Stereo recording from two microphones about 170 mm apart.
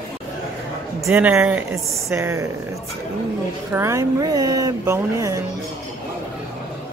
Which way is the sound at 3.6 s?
15° right (ahead or behind).